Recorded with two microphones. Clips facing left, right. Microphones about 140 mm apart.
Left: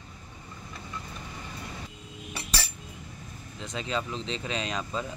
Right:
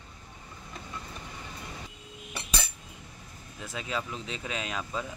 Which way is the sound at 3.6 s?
5° right (ahead or behind).